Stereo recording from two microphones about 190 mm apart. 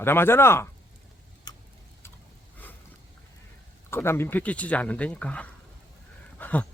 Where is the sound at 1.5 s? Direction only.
20° left (ahead or behind).